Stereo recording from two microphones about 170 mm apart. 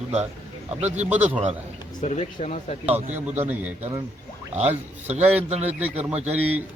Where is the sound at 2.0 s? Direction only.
40° left (ahead or behind).